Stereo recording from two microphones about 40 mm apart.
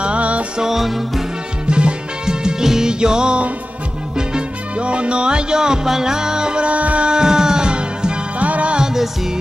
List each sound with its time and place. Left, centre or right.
0.0 s music: right
0.6 s music: centre
1.7 s music: right
7.1 s music: centre
8.4 s music: right